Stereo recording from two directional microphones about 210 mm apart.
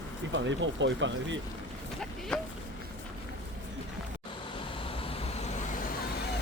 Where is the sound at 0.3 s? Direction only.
60° right (ahead or behind).